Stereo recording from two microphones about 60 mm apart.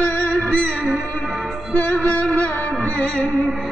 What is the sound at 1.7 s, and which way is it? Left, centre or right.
Music, left.